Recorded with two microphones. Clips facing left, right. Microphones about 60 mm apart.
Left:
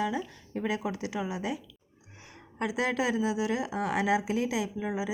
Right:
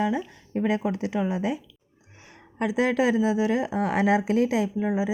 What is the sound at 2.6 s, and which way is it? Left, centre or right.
A woman's voice, right.